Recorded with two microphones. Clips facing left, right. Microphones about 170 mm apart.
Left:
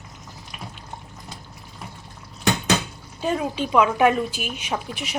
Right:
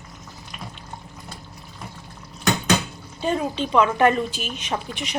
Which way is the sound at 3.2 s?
5° left (ahead or behind).